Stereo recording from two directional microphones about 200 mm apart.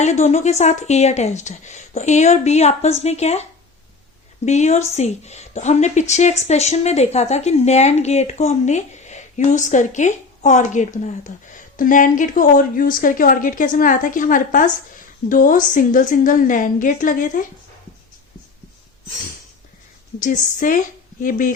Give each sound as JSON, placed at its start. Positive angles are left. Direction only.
{"t": 0.0, "sound": "a woman's voice", "side_deg": 35}
{"t": 4.4, "sound": "a woman's voice", "side_deg": 35}
{"t": 20.1, "sound": "a woman's voice", "side_deg": 40}